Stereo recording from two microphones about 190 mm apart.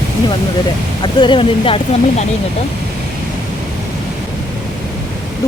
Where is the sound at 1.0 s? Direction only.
25° left (ahead or behind).